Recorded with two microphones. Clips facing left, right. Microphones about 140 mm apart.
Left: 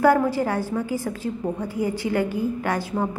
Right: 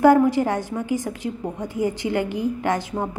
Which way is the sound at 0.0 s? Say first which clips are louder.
Right 3 dB; 20° right (ahead or behind).